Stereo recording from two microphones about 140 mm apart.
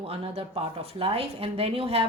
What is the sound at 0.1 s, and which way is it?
A woman's voice, 45° right (ahead or behind).